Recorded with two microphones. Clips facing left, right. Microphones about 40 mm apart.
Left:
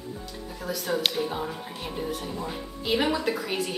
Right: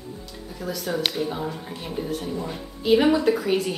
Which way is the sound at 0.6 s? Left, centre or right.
Centre.